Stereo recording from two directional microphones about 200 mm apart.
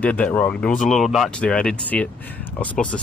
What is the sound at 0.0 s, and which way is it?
Speech, 10° left (ahead or behind).